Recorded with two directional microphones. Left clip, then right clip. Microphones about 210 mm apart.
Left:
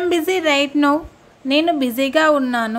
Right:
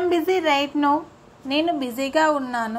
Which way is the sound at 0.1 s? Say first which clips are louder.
Left 4 dB; 30° left (ahead or behind).